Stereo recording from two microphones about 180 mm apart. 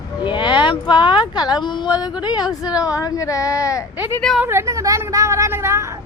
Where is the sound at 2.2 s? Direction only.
25° left (ahead or behind).